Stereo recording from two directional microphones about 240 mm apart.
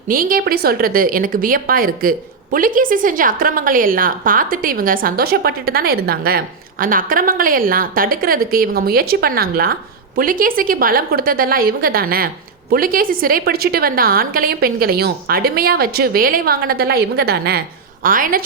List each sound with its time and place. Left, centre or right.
0.1 s a woman's voice: right